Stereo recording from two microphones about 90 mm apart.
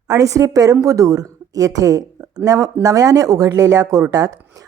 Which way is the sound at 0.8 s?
40° right (ahead or behind).